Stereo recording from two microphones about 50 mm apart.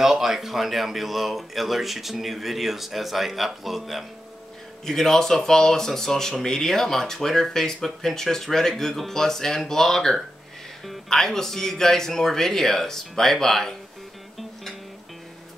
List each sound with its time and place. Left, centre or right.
0.0 s speech: centre
4.8 s speech: centre